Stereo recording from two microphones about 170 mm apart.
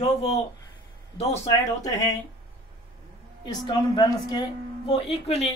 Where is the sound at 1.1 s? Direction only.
40° left (ahead or behind).